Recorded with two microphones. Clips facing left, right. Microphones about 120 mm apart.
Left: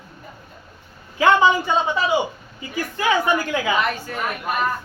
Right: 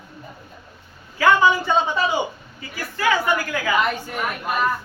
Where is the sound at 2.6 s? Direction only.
20° left (ahead or behind).